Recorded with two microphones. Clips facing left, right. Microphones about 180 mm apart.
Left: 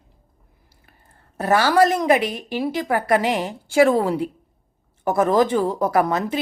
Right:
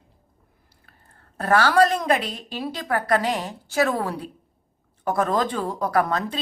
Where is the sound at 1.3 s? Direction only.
10° left (ahead or behind).